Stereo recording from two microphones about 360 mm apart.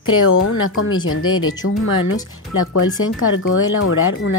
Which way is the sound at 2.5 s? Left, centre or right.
Left.